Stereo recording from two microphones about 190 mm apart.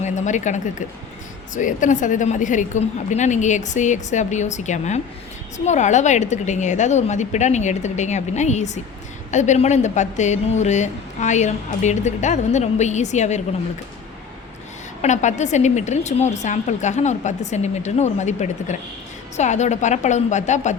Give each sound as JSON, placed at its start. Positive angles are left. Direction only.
{"t": 0.0, "sound": "speech", "side_deg": 40}
{"t": 15.0, "sound": "speech", "side_deg": 40}